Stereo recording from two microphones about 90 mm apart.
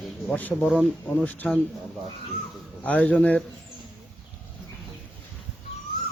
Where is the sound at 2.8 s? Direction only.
15° left (ahead or behind).